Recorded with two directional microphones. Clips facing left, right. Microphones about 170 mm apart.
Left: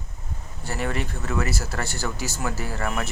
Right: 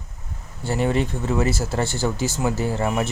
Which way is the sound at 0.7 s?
30° right (ahead or behind).